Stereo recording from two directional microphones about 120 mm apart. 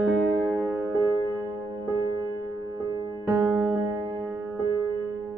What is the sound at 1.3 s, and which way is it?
Music, 35° right (ahead or behind).